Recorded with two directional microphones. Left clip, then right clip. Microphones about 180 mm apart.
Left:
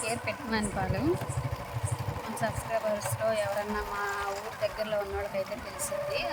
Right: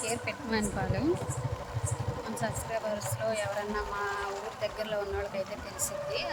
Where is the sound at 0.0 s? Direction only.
Centre (ahead or behind).